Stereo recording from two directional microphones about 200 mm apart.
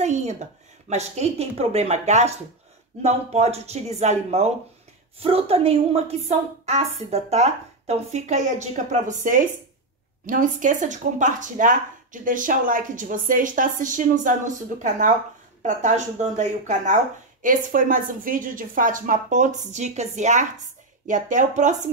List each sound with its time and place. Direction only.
0.0 s speech: 35° right (ahead or behind)